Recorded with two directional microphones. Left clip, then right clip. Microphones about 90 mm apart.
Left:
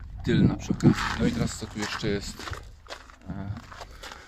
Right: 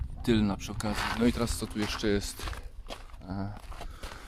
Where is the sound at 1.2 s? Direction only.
70° right (ahead or behind).